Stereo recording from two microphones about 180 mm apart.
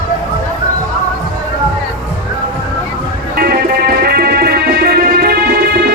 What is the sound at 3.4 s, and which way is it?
Music, 55° right (ahead or behind).